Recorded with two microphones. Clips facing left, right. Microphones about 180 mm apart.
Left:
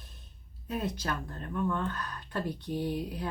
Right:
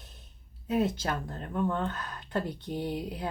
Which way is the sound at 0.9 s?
25° right (ahead or behind).